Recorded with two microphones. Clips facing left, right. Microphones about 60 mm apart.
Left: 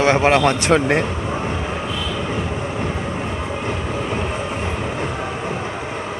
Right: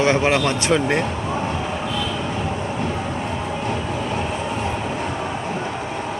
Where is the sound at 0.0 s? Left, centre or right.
Left.